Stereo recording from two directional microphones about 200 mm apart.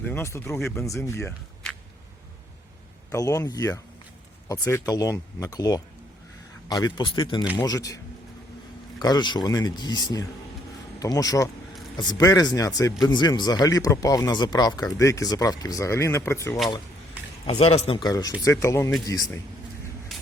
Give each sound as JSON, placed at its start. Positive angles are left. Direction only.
{"t": 0.0, "sound": "speech", "side_deg": 10}
{"t": 3.1, "sound": "speech", "side_deg": 15}
{"t": 9.0, "sound": "speech", "side_deg": 20}
{"t": 17.4, "sound": "speech", "side_deg": 30}